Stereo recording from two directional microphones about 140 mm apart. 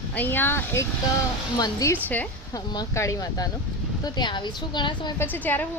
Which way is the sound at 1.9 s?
10° left (ahead or behind).